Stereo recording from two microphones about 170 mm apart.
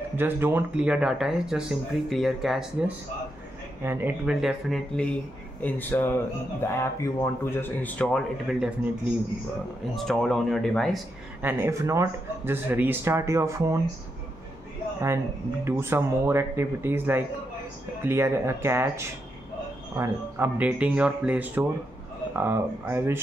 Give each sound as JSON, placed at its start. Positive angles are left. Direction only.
{"t": 0.1, "sound": "speech", "side_deg": -15}
{"t": 3.8, "sound": "speech", "side_deg": -10}
{"t": 11.4, "sound": "speech", "side_deg": -15}
{"t": 15.6, "sound": "speech", "side_deg": -15}